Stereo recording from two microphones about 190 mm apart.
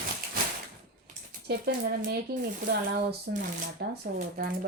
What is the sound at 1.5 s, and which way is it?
A woman's voice, 55° right (ahead or behind).